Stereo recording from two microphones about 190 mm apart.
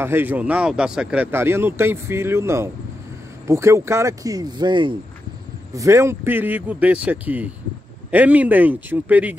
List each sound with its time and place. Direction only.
0.0 s speech: 10° right (ahead or behind)